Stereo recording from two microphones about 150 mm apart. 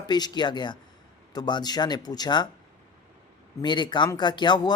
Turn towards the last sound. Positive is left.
turn(degrees=30)  # may be behind; listen again after turning